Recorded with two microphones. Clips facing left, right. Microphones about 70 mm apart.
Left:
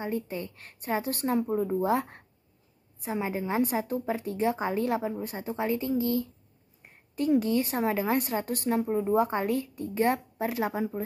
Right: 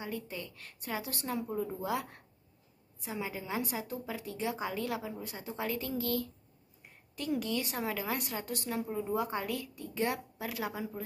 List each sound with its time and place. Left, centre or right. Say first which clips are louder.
0.0 s a woman's voice: left 8 dB; left
6.8 s a woman's voice: left 11 dB; left